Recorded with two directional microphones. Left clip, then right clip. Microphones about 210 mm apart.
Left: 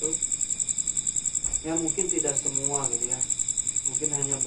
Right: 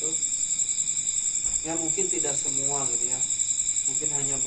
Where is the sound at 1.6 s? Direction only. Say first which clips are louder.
Left 3 dB; centre (ahead or behind).